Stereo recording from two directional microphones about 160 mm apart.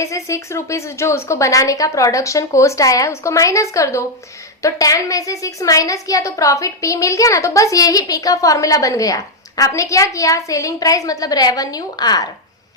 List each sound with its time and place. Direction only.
0.0 s a woman's voice: 20° left (ahead or behind)